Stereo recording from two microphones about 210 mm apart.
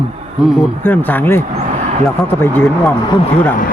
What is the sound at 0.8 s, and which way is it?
Speech, 10° left (ahead or behind).